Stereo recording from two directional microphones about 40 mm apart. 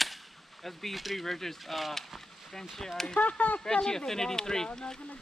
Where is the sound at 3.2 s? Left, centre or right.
Left.